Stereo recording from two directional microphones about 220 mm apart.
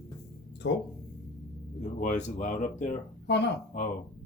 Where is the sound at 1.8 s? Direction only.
35° left (ahead or behind).